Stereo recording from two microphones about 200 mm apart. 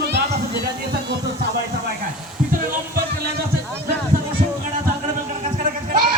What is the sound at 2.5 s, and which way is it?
Music, 50° right (ahead or behind).